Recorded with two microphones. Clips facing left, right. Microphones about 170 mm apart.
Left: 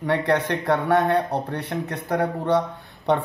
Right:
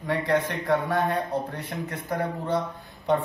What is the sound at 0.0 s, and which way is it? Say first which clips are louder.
A man's voice: left 3 dB; 70° left (ahead or behind).